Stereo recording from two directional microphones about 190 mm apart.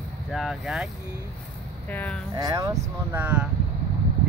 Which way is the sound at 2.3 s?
20° right (ahead or behind).